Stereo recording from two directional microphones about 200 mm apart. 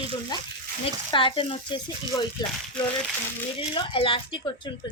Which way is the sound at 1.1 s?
25° left (ahead or behind).